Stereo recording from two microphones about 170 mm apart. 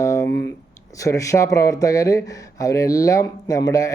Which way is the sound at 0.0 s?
20° left (ahead or behind).